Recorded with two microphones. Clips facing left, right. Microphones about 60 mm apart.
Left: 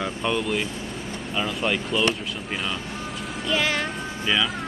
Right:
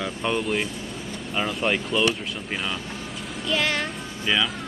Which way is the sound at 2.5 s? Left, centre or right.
Centre.